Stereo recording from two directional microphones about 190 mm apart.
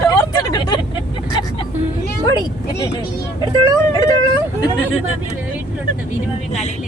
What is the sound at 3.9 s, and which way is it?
Speech, 20° left (ahead or behind).